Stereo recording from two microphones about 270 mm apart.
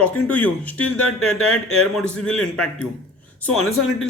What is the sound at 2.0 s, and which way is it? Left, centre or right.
Speech, centre.